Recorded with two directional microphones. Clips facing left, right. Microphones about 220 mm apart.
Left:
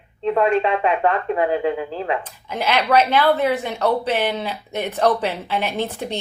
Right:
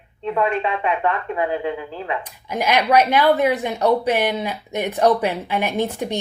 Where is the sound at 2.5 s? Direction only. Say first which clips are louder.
Right 1 dB; 10° right (ahead or behind).